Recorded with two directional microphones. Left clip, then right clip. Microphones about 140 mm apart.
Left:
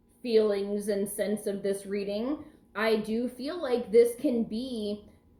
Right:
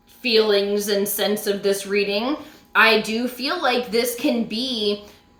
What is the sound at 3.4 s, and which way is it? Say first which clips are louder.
Speech: right 12 dB; 15° right (ahead or behind).